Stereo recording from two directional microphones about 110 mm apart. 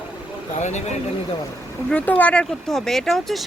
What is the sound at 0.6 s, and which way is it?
Speech, 90° left.